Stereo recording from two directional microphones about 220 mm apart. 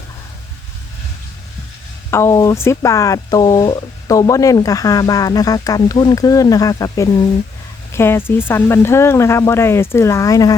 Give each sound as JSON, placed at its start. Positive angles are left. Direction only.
{"t": 2.0, "sound": "speech", "side_deg": 15}